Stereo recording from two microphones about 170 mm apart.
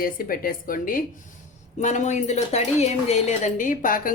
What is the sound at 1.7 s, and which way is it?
Speech, 45° left (ahead or behind).